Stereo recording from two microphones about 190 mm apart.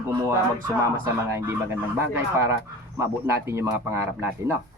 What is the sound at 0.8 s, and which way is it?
Speech, 15° right (ahead or behind).